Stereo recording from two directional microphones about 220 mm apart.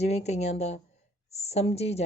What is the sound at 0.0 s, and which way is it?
A woman's voice, 30° left (ahead or behind).